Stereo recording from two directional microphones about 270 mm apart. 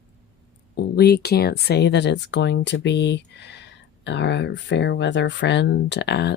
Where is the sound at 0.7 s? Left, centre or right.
Left.